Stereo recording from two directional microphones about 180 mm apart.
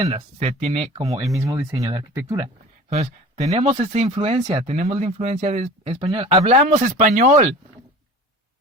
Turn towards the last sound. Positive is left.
turn(degrees=-45)  # may be behind; listen again after turning